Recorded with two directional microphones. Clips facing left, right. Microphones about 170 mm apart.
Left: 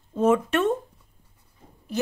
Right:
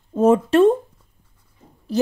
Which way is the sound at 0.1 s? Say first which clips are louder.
Right 6 dB; 35° right (ahead or behind).